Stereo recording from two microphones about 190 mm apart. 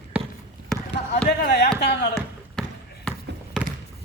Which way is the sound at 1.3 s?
60° left (ahead or behind).